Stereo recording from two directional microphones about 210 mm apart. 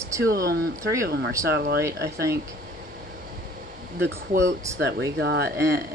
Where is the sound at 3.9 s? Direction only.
55° right (ahead or behind).